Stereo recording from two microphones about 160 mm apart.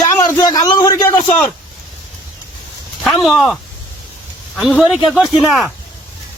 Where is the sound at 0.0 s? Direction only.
25° left (ahead or behind).